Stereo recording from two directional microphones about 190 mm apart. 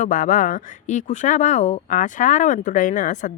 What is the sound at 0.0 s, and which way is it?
Speech, 40° left (ahead or behind).